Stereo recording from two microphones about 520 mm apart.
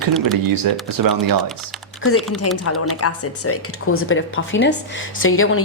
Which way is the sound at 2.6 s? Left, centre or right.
Left.